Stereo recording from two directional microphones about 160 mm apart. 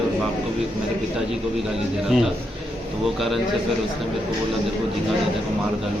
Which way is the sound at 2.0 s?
Centre (ahead or behind).